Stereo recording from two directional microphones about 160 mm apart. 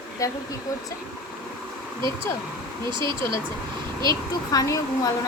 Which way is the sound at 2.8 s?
30° right (ahead or behind).